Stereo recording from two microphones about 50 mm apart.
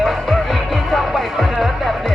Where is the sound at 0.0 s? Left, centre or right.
Centre.